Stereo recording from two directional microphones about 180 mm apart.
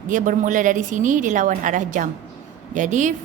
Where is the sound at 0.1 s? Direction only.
45° right (ahead or behind).